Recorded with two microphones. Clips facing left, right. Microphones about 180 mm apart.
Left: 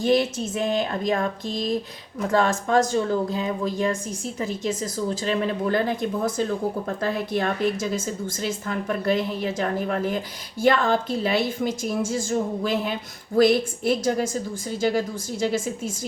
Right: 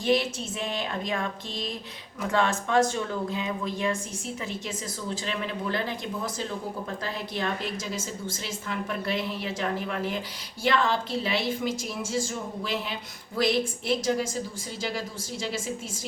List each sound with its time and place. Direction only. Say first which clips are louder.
0.0 s a woman's voice: left 4 dB; 45° left (ahead or behind)